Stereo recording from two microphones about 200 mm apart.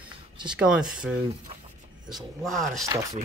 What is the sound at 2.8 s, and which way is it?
Speech, 15° right (ahead or behind).